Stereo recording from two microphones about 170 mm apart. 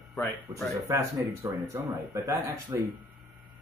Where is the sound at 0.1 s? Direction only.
Centre (ahead or behind).